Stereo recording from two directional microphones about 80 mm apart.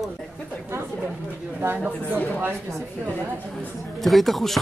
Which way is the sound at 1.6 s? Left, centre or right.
Right.